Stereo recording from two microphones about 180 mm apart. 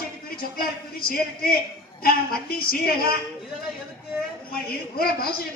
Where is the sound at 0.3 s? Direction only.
55° left (ahead or behind).